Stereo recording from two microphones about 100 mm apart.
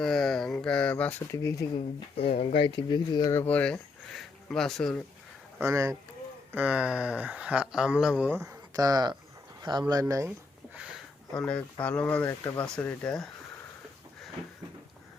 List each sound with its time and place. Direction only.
0.0 s a sound: 5° left (ahead or behind)
1.3 s speech: 30° left (ahead or behind)
1.7 s speech: 80° left; by 2.8 s 65° left (ahead or behind)
2.9 s speech: 45° left (ahead or behind)
3.3 s speech: 15° left (ahead or behind)
4.1 s speech: 5° left (ahead or behind)
5.5 s speech: 25° right (ahead or behind)
6.5 s speech: 15° right (ahead or behind)
8.4 s speech: 35° right (ahead or behind)
9.6 s a sound: 45° right (ahead or behind)
9.9 s speech: 35° right (ahead or behind)
10.8 s a sound: 10° right (ahead or behind)
11.3 s speech: 10° left (ahead or behind)